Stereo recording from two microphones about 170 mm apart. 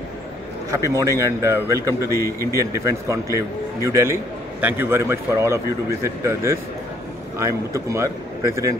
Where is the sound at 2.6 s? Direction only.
20° right (ahead or behind).